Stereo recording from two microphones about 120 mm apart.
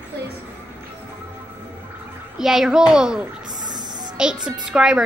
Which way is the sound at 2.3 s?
5° right (ahead or behind).